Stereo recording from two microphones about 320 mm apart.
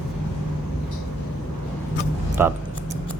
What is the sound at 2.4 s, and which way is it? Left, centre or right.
Music, centre.